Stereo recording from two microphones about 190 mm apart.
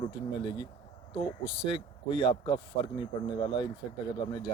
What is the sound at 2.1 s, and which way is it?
Speech, 30° left (ahead or behind).